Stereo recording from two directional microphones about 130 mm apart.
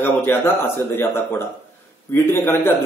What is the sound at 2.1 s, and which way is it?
Speech, 15° left (ahead or behind).